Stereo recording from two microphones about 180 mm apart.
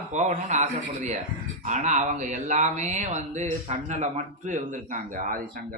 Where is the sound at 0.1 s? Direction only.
40° right (ahead or behind).